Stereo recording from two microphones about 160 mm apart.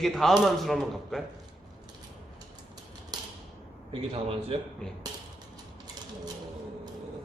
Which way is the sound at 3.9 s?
35° right (ahead or behind).